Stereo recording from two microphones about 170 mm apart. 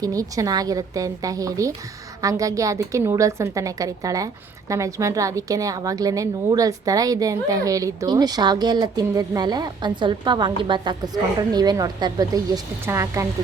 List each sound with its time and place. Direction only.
0.0 s a woman's voice: 20° right (ahead or behind)